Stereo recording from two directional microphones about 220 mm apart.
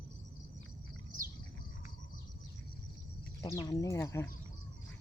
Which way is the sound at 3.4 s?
20° left (ahead or behind).